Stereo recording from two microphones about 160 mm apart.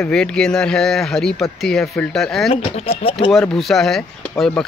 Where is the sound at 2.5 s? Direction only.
35° left (ahead or behind).